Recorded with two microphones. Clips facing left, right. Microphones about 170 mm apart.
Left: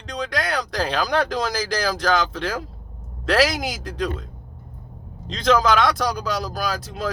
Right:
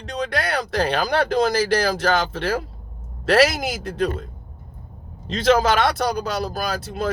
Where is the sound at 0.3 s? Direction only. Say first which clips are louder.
Even; 55° right (ahead or behind).